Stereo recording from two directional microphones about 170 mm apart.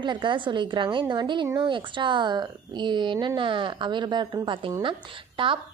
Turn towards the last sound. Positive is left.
turn(degrees=-30)  # may be behind; listen again after turning